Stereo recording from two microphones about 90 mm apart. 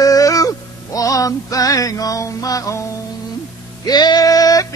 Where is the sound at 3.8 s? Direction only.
50° left (ahead or behind).